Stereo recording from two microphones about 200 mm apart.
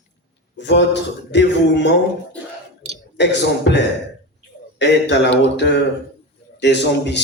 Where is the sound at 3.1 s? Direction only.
60° left (ahead or behind).